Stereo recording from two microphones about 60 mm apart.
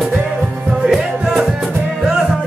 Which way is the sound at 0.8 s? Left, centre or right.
Centre.